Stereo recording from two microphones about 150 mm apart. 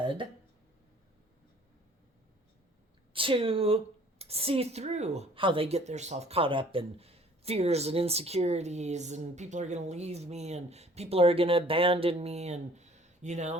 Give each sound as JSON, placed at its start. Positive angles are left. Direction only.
{"t": 0.0, "sound": "speech", "side_deg": -35}
{"t": 3.1, "sound": "a woman's voice", "side_deg": -35}